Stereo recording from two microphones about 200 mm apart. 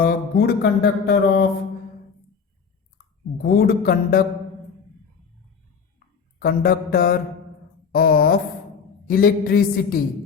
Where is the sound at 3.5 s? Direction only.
45° left (ahead or behind).